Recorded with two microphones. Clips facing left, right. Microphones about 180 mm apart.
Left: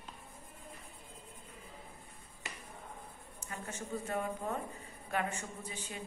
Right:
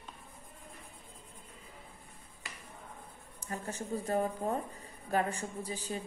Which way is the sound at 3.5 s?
35° right (ahead or behind).